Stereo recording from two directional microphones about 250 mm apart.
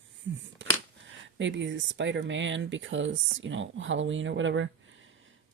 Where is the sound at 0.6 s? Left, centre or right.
Right.